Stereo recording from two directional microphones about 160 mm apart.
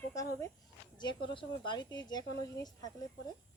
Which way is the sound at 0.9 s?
30° left (ahead or behind).